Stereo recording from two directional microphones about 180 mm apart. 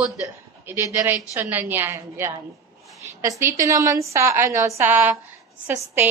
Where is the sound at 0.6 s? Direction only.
15° right (ahead or behind).